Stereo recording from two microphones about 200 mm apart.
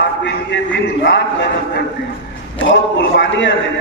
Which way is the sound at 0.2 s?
60° left (ahead or behind).